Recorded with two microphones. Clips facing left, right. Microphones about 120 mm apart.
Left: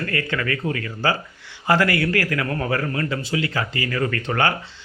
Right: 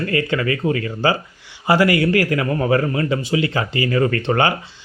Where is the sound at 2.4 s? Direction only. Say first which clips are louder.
Right 5 dB; 10° right (ahead or behind).